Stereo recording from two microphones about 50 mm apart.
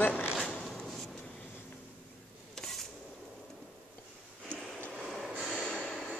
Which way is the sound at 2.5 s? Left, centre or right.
Centre.